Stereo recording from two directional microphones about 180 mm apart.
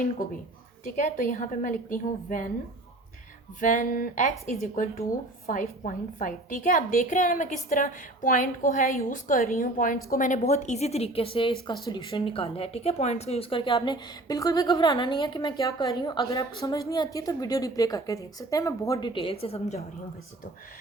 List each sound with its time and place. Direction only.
0.9 s a woman's voice: 45° left (ahead or behind)
3.6 s a woman's voice: 45° left (ahead or behind)